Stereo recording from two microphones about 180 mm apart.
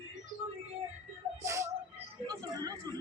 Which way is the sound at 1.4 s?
15° right (ahead or behind).